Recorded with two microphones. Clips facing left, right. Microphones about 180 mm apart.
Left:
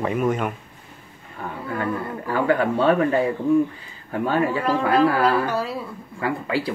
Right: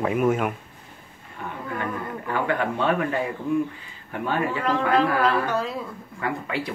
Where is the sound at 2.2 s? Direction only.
35° left (ahead or behind).